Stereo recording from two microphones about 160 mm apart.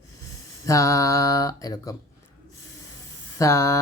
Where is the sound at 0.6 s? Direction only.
20° left (ahead or behind).